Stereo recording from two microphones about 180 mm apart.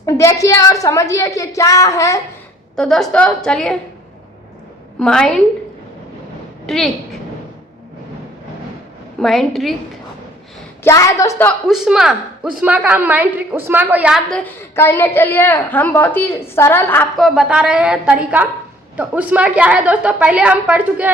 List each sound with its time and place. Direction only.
0.0 s a woman's voice: 15° left (ahead or behind)
2.7 s a woman's voice: centre (ahead or behind)
4.9 s a woman's voice: 5° left (ahead or behind)
6.7 s a woman's voice: centre (ahead or behind)
9.2 s a woman's voice: centre (ahead or behind)
10.8 s a woman's voice: 20° left (ahead or behind)
11.7 s a woman's voice: 5° right (ahead or behind)
14.3 s a woman's voice: 10° left (ahead or behind)
17.2 s a woman's voice: centre (ahead or behind)